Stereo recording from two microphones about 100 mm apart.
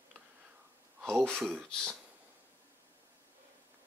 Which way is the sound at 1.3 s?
15° right (ahead or behind).